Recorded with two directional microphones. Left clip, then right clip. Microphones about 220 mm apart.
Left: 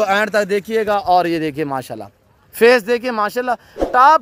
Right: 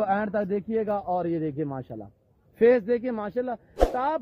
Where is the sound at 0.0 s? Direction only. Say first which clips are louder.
Left 10 dB; 45° left (ahead or behind).